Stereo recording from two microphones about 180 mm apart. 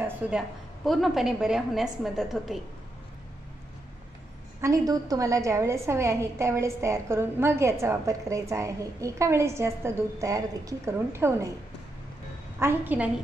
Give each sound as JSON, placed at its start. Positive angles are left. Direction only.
{"t": 0.0, "sound": "a woman's voice", "side_deg": -5}
{"t": 4.6, "sound": "a woman's voice", "side_deg": -20}
{"t": 12.5, "sound": "a woman's voice", "side_deg": -10}